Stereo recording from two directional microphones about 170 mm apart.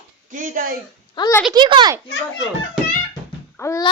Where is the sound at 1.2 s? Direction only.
25° left (ahead or behind).